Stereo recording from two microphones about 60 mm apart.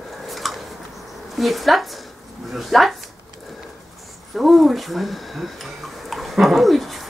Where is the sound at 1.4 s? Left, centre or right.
Centre.